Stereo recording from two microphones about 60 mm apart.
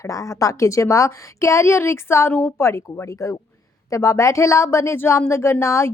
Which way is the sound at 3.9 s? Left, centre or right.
Left.